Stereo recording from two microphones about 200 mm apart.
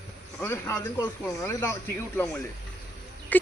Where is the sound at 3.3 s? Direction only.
10° left (ahead or behind).